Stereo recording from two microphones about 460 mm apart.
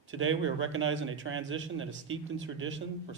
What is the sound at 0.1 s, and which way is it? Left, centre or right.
Speech, right.